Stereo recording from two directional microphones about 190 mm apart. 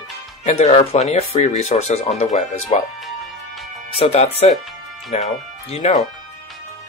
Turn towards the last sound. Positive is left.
turn(degrees=35)  # may be behind; listen again after turning